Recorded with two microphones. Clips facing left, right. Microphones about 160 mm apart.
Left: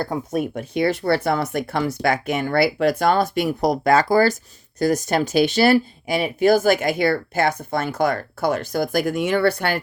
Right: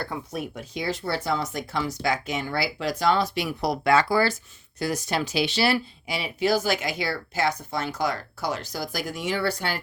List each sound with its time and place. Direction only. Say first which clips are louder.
0.0 s speech: left 8 dB; 45° left (ahead or behind)